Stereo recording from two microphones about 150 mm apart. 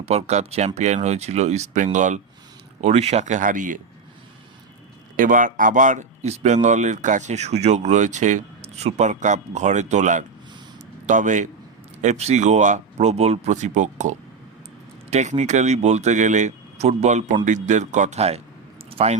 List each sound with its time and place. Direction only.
0.0 s speech: 45° right (ahead or behind); by 3.8 s 60° right (ahead or behind)
5.1 s speech: 65° right (ahead or behind); by 18.4 s 45° right (ahead or behind)
18.9 s a sound: 40° right (ahead or behind)